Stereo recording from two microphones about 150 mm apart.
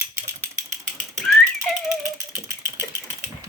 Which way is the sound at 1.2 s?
Centre (ahead or behind).